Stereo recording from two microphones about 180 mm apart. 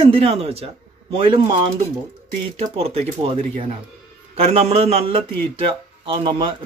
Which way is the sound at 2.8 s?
30° right (ahead or behind).